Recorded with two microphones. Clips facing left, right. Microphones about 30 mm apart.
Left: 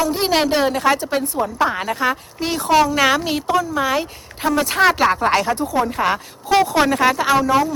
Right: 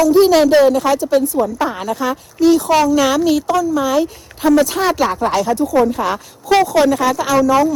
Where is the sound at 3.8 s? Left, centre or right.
Left.